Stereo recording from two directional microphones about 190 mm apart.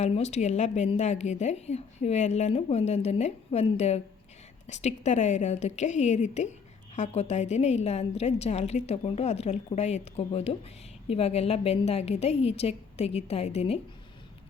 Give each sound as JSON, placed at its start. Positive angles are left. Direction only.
{"t": 0.0, "sound": "a woman's voice", "side_deg": 35}